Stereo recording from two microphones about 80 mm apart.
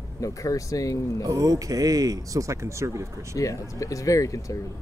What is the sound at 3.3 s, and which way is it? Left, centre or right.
Speech, left.